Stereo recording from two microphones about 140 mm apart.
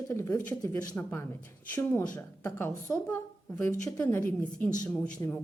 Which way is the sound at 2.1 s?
15° left (ahead or behind).